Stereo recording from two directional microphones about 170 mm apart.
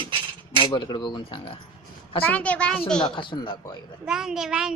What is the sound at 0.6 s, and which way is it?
Speech, 30° left (ahead or behind).